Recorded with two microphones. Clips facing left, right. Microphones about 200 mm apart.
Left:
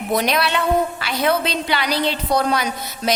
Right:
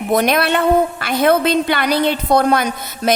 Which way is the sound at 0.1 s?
50° right (ahead or behind).